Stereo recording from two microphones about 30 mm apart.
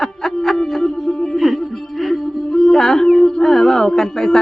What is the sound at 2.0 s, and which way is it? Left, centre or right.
Music, centre.